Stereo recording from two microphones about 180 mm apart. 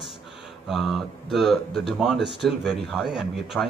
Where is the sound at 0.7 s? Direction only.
Centre (ahead or behind).